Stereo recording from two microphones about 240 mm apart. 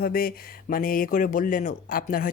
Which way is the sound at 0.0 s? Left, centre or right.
Left.